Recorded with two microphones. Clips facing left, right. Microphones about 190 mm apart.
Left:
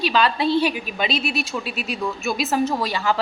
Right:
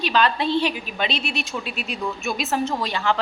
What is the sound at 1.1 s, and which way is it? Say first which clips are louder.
Speech: left 3 dB; 40° left (ahead or behind).